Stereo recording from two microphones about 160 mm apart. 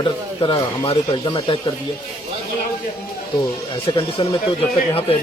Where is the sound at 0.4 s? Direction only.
30° left (ahead or behind).